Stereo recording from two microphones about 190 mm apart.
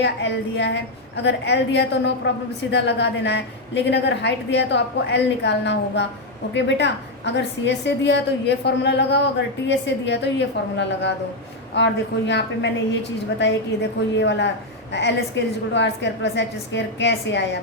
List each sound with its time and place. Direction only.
0.0 s a woman's voice: 65° left (ahead or behind)
14.2 s a woman's voice: 70° left (ahead or behind)